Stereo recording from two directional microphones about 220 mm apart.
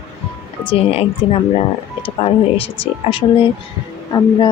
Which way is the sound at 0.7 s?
25° left (ahead or behind).